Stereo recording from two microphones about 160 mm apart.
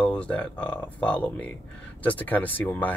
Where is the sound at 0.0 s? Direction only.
5° left (ahead or behind).